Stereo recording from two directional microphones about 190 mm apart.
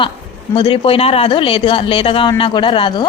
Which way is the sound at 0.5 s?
30° left (ahead or behind).